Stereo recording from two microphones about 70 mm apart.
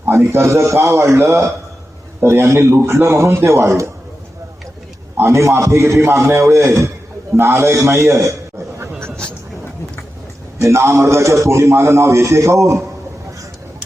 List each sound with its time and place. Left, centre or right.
0.1 s a man's voice: right
5.1 s a man's voice: right
10.6 s a man's voice: right